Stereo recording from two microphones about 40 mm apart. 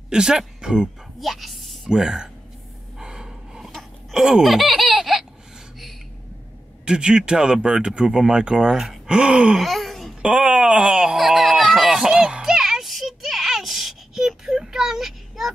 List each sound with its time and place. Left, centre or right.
0.1 s speech: centre
1.2 s speech: centre
1.9 s speech: centre
3.0 s a sound: centre
4.1 s speech: centre
6.8 s speech: right
9.6 s wail: centre
10.2 s speech: right
11.1 s a sound: centre
12.0 s a sound: centre